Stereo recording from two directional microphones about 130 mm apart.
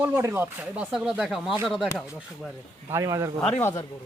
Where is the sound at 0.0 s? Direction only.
15° right (ahead or behind).